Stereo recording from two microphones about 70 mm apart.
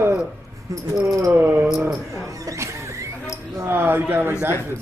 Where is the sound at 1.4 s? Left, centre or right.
Right.